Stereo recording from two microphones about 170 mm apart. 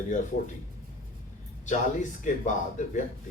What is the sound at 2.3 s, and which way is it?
Speech, 45° left (ahead or behind).